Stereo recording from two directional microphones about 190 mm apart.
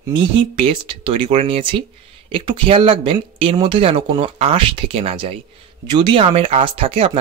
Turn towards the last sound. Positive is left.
turn(degrees=-30)  # may be behind; listen again after turning